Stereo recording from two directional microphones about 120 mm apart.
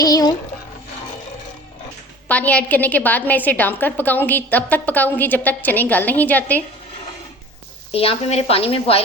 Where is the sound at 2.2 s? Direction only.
10° left (ahead or behind).